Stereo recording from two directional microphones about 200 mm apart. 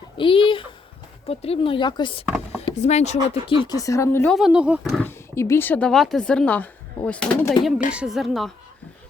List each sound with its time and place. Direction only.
0.2 s a sound: 25° left (ahead or behind)
1.3 s speech: 30° left (ahead or behind)
2.2 s speech: 5° right (ahead or behind)
2.6 s speech: 35° left (ahead or behind); by 4.4 s 10° left (ahead or behind)
4.4 s speech: 5° right (ahead or behind)
5.0 s speech: 15° left (ahead or behind)